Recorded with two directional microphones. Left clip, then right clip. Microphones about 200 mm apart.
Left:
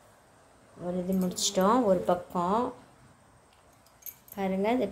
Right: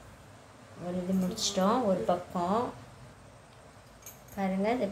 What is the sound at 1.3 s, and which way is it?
A woman's voice, 40° left (ahead or behind).